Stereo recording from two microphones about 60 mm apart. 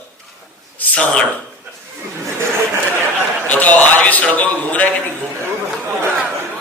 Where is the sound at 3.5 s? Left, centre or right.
Left.